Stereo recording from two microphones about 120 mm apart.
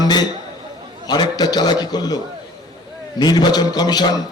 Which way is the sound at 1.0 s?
35° left (ahead or behind).